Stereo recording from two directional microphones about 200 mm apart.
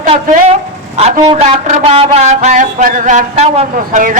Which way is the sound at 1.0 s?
30° right (ahead or behind).